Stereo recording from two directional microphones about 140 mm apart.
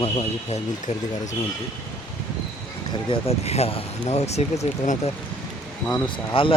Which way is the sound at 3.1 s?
45° left (ahead or behind).